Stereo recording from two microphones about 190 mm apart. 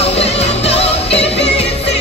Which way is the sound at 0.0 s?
35° left (ahead or behind).